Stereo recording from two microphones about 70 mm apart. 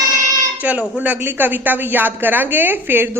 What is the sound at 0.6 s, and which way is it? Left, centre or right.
Speech, right.